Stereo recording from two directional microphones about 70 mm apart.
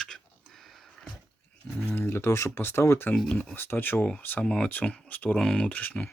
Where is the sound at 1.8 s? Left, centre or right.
Left.